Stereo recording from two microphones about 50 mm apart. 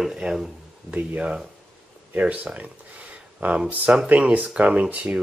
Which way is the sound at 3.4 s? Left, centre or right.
Right.